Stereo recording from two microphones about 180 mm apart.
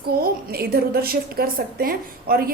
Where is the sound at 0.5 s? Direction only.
60° right (ahead or behind).